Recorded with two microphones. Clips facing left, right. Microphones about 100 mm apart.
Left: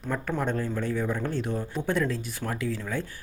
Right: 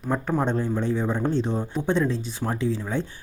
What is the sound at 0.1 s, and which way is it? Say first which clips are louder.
Speech: right 4 dB; 25° right (ahead or behind).